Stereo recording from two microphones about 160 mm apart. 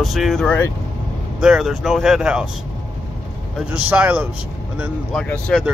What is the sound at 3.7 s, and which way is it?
Speech, 10° right (ahead or behind).